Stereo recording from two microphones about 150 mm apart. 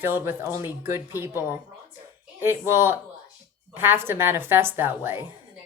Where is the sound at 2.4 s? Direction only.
15° right (ahead or behind).